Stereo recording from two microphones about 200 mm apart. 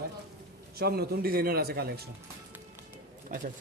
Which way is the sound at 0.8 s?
50° right (ahead or behind).